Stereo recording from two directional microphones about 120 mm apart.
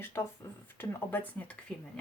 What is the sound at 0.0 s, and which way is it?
Speech, 20° left (ahead or behind).